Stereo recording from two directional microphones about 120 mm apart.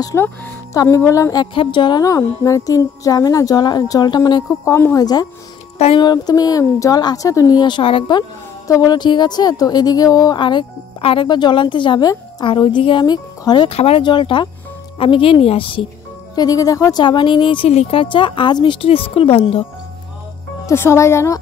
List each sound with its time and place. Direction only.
0.0 s music: 20° left (ahead or behind)
1.5 s speech: 45° left (ahead or behind)
2.0 s music: 25° left (ahead or behind)
5.0 s speech: 35° left (ahead or behind)
8.6 s speech: 30° left (ahead or behind)
13.7 s speech: 55° left (ahead or behind)
14.0 s speech: 40° left (ahead or behind)
16.3 s music: 30° left (ahead or behind)
17.0 s speech: 40° left (ahead or behind)
17.6 s speech: 60° left (ahead or behind)
18.0 s speech: 45° left (ahead or behind)
20.6 s music: 20° left (ahead or behind)